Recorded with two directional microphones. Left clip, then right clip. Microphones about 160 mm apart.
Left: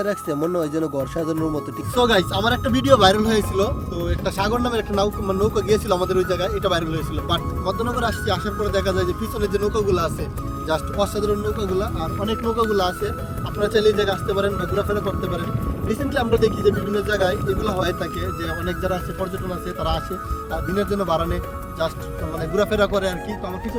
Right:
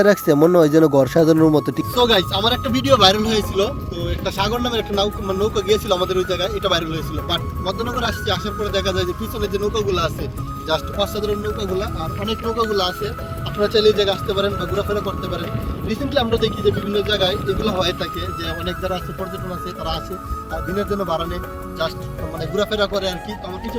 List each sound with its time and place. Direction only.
0.0 s speech: 30° right (ahead or behind)
2.0 s speech: 5° left (ahead or behind)
20.7 s speech: centre (ahead or behind)
22.5 s speech: 5° left (ahead or behind)